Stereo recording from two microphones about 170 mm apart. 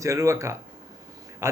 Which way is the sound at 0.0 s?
20° right (ahead or behind).